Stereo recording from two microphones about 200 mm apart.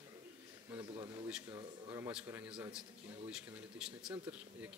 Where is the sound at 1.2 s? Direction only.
10° right (ahead or behind).